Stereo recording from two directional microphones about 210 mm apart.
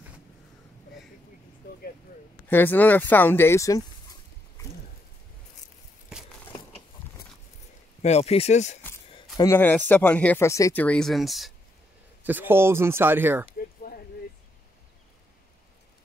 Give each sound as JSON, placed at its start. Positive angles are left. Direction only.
{"t": 2.4, "sound": "speech", "side_deg": 10}
{"t": 8.0, "sound": "speech", "side_deg": 30}
{"t": 8.8, "sound": "speech", "side_deg": 10}
{"t": 13.9, "sound": "a sound", "side_deg": 45}